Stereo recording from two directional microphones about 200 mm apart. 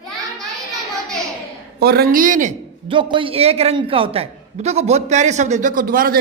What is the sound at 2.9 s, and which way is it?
A man's voice, 25° right (ahead or behind).